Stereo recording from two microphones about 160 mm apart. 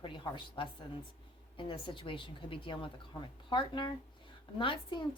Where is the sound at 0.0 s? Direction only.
30° left (ahead or behind).